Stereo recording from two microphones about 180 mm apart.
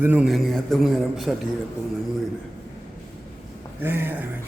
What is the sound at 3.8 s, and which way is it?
Speech, 10° right (ahead or behind).